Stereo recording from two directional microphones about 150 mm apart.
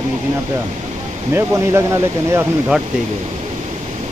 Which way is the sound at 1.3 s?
15° right (ahead or behind).